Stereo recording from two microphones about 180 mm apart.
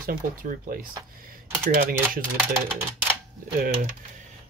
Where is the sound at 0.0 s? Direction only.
55° right (ahead or behind).